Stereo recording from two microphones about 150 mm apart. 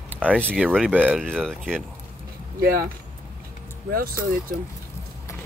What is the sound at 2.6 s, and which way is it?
Speech, 90° right.